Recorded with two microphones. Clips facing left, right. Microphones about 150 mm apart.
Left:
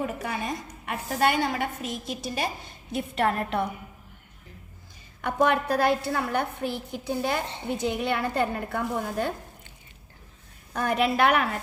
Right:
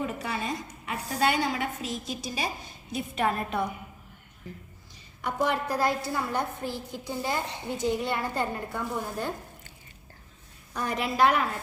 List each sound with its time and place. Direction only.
0.0 s a woman's voice: 50° left (ahead or behind)
5.2 s a woman's voice: 60° left (ahead or behind)
10.8 s a woman's voice: 60° left (ahead or behind)